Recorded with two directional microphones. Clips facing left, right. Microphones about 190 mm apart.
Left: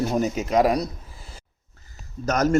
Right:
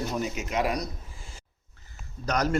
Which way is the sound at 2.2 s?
45° left (ahead or behind).